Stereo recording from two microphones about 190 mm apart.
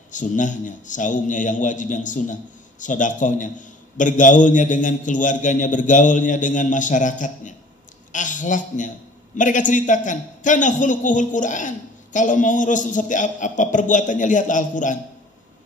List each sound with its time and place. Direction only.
0.1 s a man's voice: 40° left (ahead or behind)